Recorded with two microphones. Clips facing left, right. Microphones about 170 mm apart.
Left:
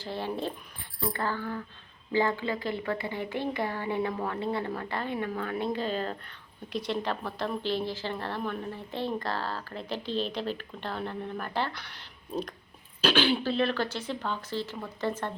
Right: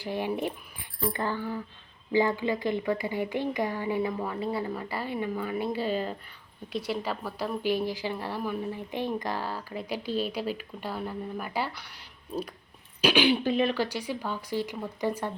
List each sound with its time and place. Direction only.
0.0 s a woman's voice: 15° right (ahead or behind)
13.0 s a woman's voice: 15° right (ahead or behind)